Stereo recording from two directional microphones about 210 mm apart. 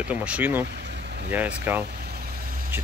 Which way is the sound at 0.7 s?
50° right (ahead or behind).